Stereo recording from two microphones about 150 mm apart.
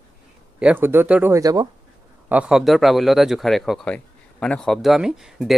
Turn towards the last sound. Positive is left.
turn(degrees=-5)  # may be behind; listen again after turning